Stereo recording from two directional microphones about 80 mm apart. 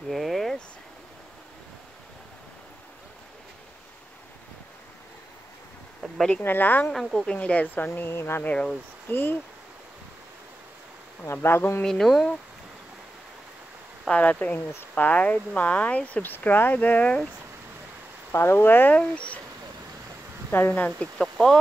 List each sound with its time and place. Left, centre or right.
0.1 s a sound: centre
6.1 s speech: centre
6.4 s speech: left
6.9 s speech: centre; by 8.4 s left
8.4 s speech: centre
11.3 s speech: left
11.8 s speech: centre
14.0 s speech: centre
18.3 s speech: left; by 19.4 s centre
20.5 s speech: left